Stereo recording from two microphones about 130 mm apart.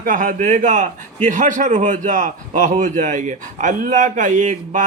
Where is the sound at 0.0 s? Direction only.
90° right.